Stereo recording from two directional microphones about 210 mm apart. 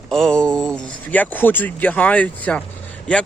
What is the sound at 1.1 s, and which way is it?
Speech, 10° left (ahead or behind).